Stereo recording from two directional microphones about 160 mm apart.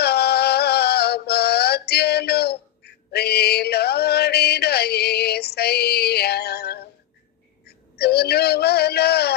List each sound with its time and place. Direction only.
0.0 s music: 85° left
7.7 s a man's voice: 90° left